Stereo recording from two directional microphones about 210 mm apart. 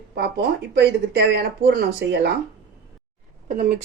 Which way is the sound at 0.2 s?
50° right (ahead or behind).